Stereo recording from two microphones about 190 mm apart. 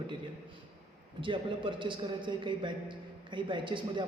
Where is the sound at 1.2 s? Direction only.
25° right (ahead or behind).